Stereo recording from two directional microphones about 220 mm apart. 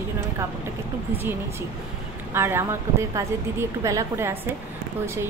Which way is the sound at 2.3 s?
10° right (ahead or behind).